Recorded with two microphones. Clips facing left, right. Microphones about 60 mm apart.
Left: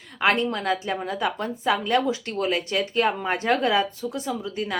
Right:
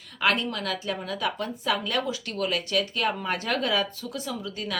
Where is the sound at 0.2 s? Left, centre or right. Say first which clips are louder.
Left 3 dB; left.